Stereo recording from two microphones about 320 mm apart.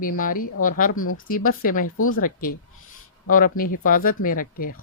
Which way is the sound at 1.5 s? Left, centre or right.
Left.